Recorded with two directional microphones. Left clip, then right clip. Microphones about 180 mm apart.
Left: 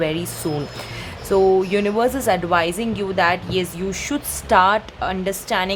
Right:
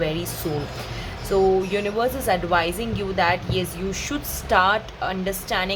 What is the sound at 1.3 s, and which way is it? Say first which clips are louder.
A woman's voice: left 4 dB; 30° left (ahead or behind).